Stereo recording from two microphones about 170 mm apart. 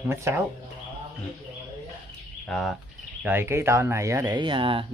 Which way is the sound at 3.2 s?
15° right (ahead or behind).